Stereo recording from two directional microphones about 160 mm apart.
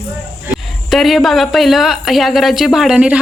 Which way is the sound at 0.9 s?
Centre (ahead or behind).